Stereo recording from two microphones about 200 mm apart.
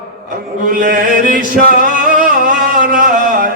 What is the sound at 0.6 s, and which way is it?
Mantra, 45° right (ahead or behind).